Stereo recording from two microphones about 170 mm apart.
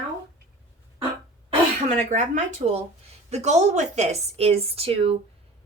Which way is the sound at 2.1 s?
45° right (ahead or behind).